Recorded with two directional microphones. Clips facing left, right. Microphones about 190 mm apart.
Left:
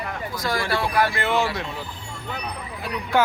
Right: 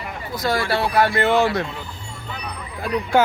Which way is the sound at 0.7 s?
30° right (ahead or behind).